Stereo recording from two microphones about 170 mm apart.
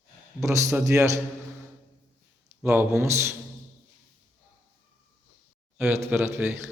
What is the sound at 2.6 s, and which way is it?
Speech, 10° right (ahead or behind).